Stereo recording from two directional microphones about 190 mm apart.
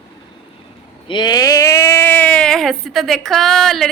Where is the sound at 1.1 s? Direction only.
25° left (ahead or behind).